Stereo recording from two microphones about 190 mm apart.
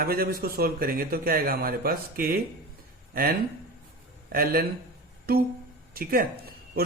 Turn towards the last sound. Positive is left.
turn(degrees=-50)  # may be behind; listen again after turning